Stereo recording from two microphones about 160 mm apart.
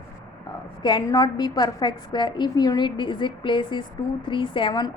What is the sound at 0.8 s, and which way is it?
A woman's voice, 25° left (ahead or behind).